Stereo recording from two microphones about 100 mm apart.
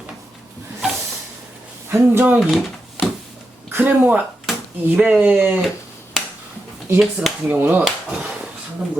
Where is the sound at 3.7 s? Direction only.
20° right (ahead or behind).